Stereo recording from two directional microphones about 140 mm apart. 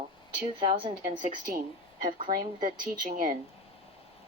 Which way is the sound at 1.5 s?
70° right (ahead or behind).